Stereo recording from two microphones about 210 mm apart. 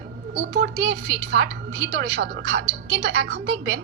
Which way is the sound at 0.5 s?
60° right (ahead or behind).